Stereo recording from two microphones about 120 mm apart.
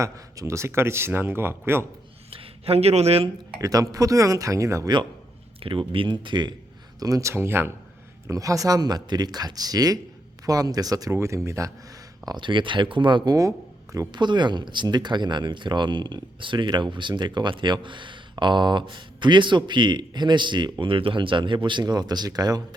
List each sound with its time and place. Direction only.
0.0 s speech: 25° right (ahead or behind)
2.3 s speech: 55° right (ahead or behind)
3.6 s speech: 30° right (ahead or behind)
5.5 s speech: 50° right (ahead or behind)
7.0 s speech: 25° right (ahead or behind)
12.2 s speech: 35° right (ahead or behind)